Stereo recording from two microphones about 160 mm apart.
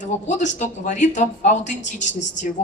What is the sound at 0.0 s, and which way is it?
A woman's voice, 50° left (ahead or behind).